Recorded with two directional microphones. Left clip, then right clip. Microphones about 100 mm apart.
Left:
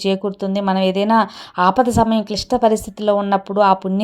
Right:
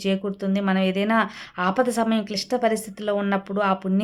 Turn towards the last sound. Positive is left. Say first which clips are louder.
# left 9 dB
turn(degrees=45)  # may be behind; listen again after turning